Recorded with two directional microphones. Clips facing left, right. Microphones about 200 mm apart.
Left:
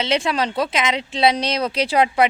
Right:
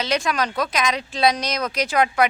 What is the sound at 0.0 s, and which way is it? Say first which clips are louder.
Speech: left 2 dB; 25° left (ahead or behind).